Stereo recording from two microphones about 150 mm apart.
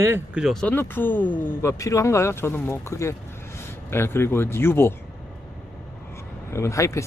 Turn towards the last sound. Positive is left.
turn(degrees=20)  # may be behind; listen again after turning